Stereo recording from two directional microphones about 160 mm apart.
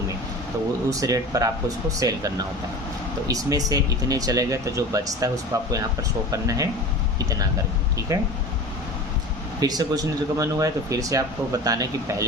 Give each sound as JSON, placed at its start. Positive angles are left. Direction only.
{"t": 0.9, "sound": "speech", "side_deg": -20}
{"t": 8.1, "sound": "speech", "side_deg": -20}
{"t": 9.6, "sound": "speech", "side_deg": -25}